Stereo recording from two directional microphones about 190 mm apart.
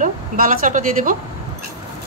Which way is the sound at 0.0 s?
45° right (ahead or behind).